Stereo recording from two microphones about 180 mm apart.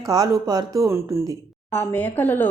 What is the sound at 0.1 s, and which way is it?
Speech, 20° right (ahead or behind).